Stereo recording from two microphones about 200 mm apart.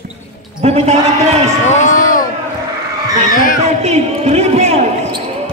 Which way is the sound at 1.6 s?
35° left (ahead or behind).